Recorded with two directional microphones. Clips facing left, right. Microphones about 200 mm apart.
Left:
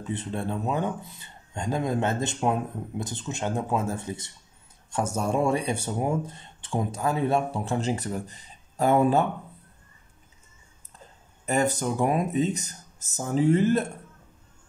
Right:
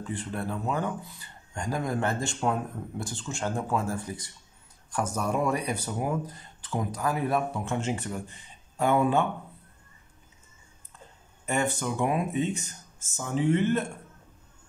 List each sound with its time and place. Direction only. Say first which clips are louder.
0.0 s speech: left 2 dB; 20° left (ahead or behind); by 9.3 s 40° left (ahead or behind)
11.4 s speech: left 3 dB; 40° left (ahead or behind)